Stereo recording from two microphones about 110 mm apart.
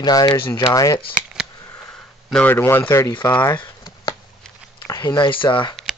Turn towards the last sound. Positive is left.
turn(degrees=45)  # may be behind; listen again after turning